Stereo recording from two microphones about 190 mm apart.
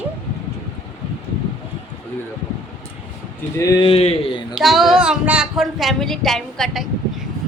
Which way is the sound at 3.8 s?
30° left (ahead or behind).